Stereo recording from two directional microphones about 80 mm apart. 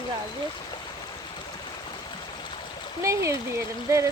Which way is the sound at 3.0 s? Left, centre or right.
Right.